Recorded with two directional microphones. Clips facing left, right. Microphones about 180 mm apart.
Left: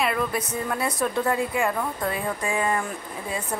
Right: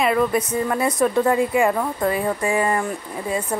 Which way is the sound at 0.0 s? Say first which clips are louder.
Right 6 dB; centre (ahead or behind).